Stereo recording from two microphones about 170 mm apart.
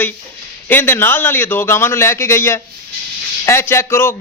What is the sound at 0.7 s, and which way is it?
Speech, 10° left (ahead or behind).